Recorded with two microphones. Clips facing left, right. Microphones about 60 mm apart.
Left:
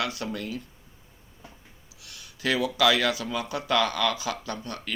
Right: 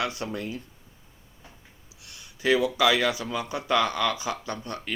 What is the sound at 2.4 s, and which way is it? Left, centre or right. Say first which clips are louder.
Speech: right 1 dB; right.